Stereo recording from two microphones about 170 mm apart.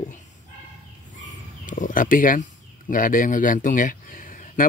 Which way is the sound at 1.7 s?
50° left (ahead or behind).